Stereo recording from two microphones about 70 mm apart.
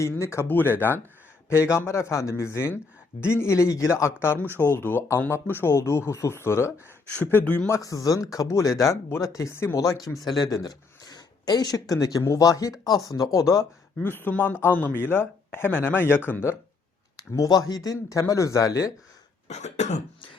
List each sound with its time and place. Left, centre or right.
0.0 s speech: left
0.4 s speech: left
1.5 s speech: left
7.4 s speech: centre
7.7 s speech: left
10.2 s speech: left
14.0 s speech: left
17.2 s speech: left